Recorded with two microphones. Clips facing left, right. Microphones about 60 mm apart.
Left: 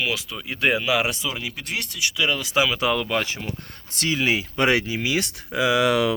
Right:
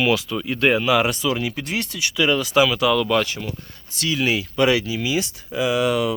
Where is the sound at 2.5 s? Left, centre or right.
Centre.